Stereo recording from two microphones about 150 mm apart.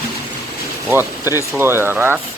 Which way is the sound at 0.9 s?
15° right (ahead or behind).